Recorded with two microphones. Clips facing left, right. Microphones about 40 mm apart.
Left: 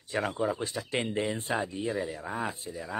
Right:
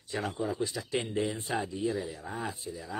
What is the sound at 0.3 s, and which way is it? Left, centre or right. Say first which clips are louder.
Speech: left 2 dB; left.